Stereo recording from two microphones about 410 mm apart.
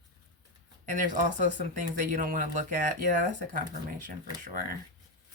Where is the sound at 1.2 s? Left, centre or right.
Centre.